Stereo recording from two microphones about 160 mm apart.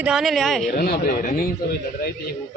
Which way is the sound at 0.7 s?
70° left (ahead or behind).